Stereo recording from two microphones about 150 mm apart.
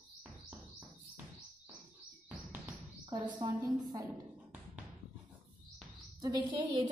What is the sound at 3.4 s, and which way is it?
Speech, 25° right (ahead or behind).